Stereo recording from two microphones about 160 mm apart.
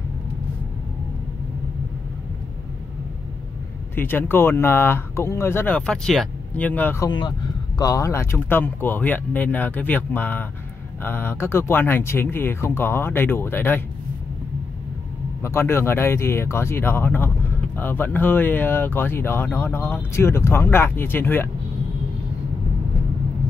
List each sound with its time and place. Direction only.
3.9 s speech: 10° left (ahead or behind)
7.1 s speech: 25° left (ahead or behind)
15.4 s speech: 15° left (ahead or behind)